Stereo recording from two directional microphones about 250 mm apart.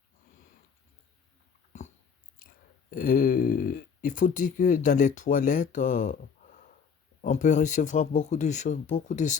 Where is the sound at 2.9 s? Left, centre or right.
Left.